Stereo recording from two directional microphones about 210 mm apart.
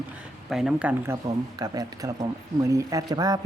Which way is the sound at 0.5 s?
5° right (ahead or behind).